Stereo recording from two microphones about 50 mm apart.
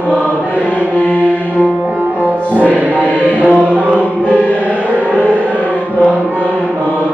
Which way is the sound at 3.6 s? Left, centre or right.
Right.